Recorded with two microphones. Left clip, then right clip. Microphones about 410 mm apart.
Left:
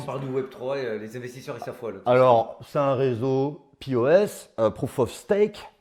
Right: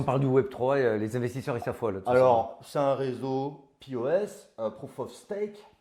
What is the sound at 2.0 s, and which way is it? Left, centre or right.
Speech, centre.